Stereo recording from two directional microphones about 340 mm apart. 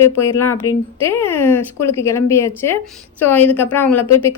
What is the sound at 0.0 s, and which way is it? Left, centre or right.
A woman's voice, centre.